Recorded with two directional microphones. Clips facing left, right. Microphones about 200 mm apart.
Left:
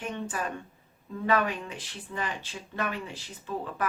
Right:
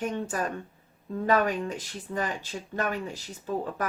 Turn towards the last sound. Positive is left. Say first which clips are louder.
# right 3 dB
turn(degrees=-40)  # may be behind; listen again after turning